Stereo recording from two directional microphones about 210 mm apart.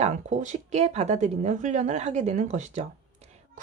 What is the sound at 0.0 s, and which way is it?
Speech, 35° right (ahead or behind).